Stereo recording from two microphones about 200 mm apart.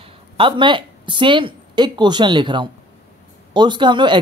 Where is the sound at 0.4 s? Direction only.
25° right (ahead or behind).